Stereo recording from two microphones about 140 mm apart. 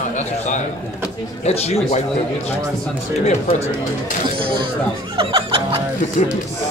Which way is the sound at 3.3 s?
50° left (ahead or behind).